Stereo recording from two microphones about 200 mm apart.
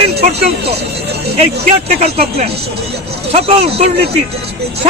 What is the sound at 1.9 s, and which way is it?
A man's voice, 30° right (ahead or behind).